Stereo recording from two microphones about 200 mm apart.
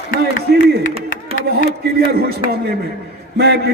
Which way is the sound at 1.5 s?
50° right (ahead or behind).